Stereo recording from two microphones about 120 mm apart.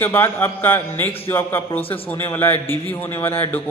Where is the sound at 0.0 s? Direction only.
20° left (ahead or behind).